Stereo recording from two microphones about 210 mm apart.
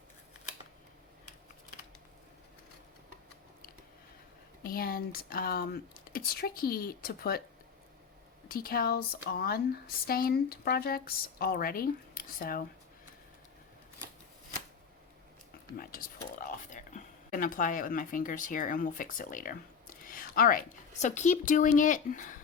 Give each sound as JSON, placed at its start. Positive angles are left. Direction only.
{"t": 4.6, "sound": "speech", "side_deg": 45}
{"t": 8.4, "sound": "speech", "side_deg": 45}
{"t": 15.8, "sound": "speech", "side_deg": 40}